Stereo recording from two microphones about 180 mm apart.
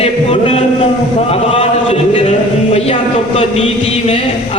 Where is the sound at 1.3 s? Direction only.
30° left (ahead or behind).